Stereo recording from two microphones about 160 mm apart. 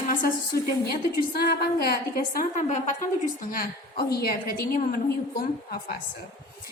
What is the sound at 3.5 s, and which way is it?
A woman's voice, 70° left (ahead or behind).